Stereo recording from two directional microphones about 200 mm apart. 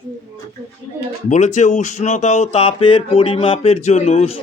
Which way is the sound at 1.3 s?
35° left (ahead or behind).